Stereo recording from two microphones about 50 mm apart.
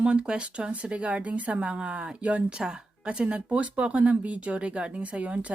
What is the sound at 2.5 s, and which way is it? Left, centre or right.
Speech, centre.